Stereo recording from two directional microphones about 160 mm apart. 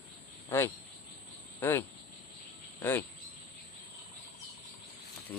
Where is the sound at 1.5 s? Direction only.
15° left (ahead or behind).